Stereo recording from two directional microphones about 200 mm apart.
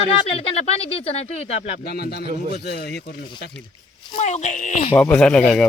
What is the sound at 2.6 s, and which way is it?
Speech, 55° left (ahead or behind).